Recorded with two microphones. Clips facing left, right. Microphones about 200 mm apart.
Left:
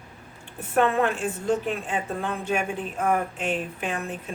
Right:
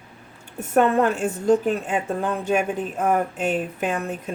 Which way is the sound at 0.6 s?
45° right (ahead or behind).